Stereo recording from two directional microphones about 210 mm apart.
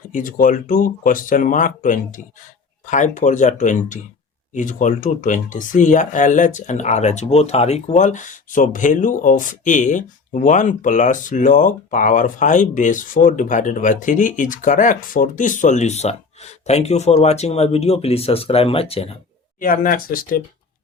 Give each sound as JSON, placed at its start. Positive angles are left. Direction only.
{"t": 0.1, "sound": "speech", "side_deg": 40}
{"t": 19.5, "sound": "speech", "side_deg": 40}